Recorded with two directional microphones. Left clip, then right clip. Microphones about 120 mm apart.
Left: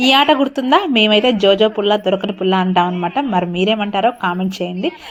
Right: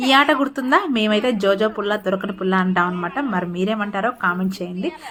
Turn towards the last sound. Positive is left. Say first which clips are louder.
# left 5 dB
turn(degrees=20)  # may be behind; listen again after turning